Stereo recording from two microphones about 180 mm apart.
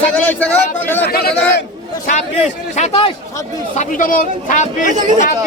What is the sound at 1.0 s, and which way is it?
Speech, 60° left (ahead or behind).